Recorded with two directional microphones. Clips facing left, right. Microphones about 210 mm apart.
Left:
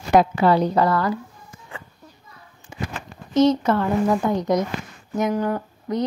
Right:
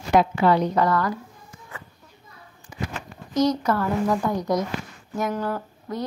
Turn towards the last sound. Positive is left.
turn(degrees=15)  # may be behind; listen again after turning